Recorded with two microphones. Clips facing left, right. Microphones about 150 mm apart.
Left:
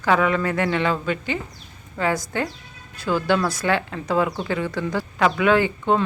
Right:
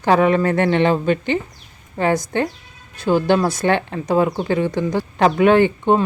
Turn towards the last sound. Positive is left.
turn(degrees=-25)  # may be behind; listen again after turning